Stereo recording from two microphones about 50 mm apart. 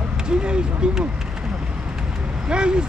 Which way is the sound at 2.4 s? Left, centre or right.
Centre.